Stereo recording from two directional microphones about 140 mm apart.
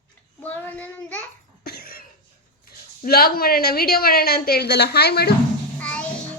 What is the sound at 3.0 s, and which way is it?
A woman's voice, 90° left.